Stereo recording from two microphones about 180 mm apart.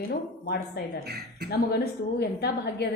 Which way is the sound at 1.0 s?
65° right (ahead or behind).